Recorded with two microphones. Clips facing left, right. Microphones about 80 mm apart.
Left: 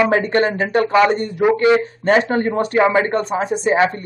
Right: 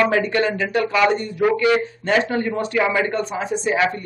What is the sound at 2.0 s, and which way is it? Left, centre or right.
Speech, left.